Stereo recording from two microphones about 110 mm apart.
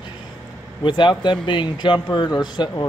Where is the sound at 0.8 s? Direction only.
45° left (ahead or behind).